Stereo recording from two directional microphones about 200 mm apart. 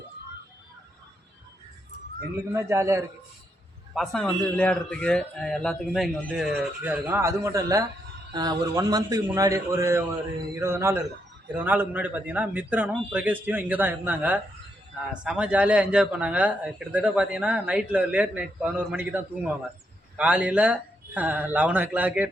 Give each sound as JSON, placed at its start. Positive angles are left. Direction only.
{"t": 2.5, "sound": "a man's voice", "side_deg": -15}
{"t": 3.9, "sound": "a man's voice", "side_deg": 0}